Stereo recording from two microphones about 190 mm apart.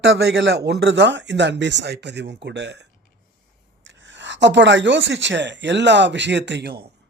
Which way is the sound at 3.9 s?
70° right (ahead or behind).